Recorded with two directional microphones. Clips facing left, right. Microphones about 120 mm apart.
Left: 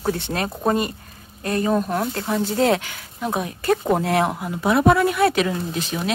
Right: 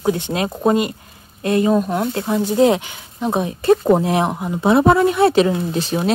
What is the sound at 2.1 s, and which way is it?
Speech, 15° right (ahead or behind).